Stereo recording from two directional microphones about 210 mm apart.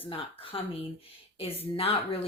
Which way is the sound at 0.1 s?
25° left (ahead or behind).